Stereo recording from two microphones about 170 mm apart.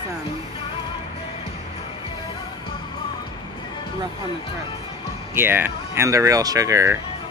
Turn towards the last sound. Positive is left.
turn(degrees=-15)  # may be behind; listen again after turning